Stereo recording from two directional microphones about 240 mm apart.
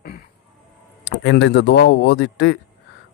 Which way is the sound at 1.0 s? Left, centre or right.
Left.